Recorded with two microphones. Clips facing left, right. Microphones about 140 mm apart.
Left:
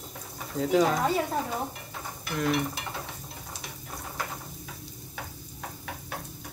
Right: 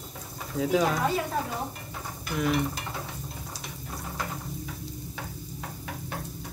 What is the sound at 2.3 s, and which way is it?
Speech, centre (ahead or behind).